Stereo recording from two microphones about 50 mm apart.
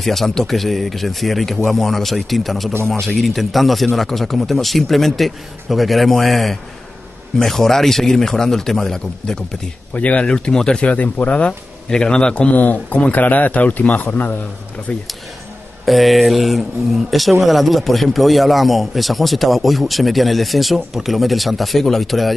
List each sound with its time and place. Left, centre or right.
0.0 s a man's voice: centre
9.9 s speech: left
10.2 s a man's voice: centre
10.8 s speech: left
11.9 s a man's voice: centre; by 14.3 s left
14.9 s speech: left
15.8 s speech: centre